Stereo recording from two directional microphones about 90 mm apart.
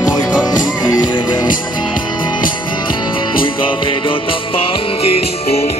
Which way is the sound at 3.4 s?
70° left (ahead or behind).